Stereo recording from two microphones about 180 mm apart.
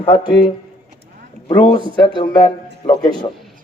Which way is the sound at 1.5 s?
25° left (ahead or behind).